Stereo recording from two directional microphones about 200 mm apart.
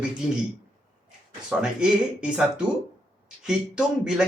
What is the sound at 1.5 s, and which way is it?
Speech, 5° right (ahead or behind).